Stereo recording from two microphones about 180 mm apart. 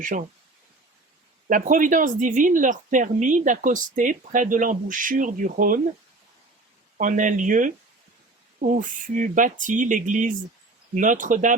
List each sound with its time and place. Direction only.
0.0 s speech: 45° right (ahead or behind)
1.5 s speech: 45° right (ahead or behind)
7.0 s speech: 45° right (ahead or behind)